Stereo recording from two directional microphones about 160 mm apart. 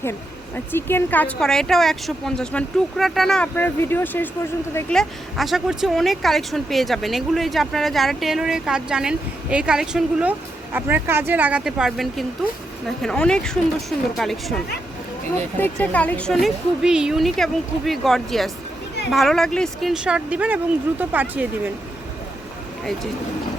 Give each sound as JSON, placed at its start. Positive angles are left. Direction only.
{"t": 0.0, "sound": "speech", "side_deg": 15}
{"t": 4.9, "sound": "speech", "side_deg": 0}